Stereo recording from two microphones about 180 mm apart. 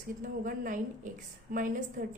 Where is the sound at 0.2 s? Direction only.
50° right (ahead or behind).